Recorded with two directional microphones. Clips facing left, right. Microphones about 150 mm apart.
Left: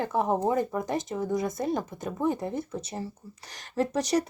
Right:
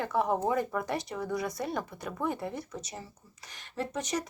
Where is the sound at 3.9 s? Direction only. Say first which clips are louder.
Left 7 dB; 75° left (ahead or behind).